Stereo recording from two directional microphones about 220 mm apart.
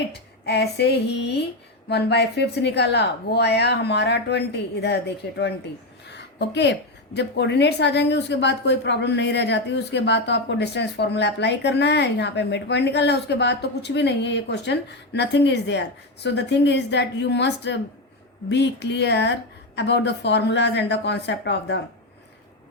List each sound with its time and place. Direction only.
0.1 s a woman's voice: 50° left (ahead or behind)